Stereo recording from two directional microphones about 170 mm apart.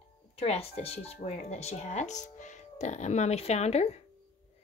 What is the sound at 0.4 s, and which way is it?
Speech, 35° left (ahead or behind).